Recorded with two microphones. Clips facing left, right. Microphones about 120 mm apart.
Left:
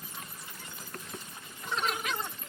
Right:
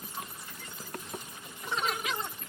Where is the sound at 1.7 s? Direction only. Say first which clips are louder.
Even; centre (ahead or behind).